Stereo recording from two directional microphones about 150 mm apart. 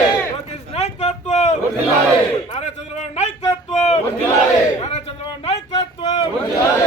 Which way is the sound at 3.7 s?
45° left (ahead or behind).